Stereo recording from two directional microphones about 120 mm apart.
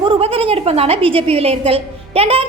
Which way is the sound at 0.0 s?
50° right (ahead or behind).